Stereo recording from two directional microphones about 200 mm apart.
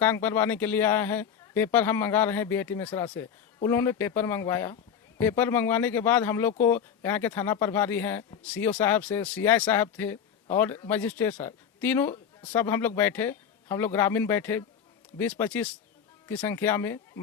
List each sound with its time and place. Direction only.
0.0 s a man's voice: 10° left (ahead or behind)